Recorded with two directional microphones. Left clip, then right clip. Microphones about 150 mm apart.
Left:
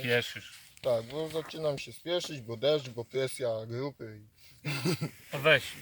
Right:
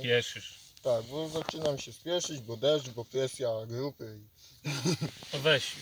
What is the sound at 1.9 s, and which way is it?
Speech, 10° right (ahead or behind).